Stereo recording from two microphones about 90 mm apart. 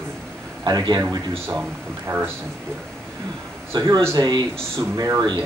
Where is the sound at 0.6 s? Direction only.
50° right (ahead or behind).